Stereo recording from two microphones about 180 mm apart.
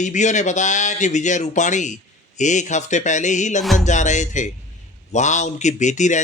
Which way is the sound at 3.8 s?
40° left (ahead or behind).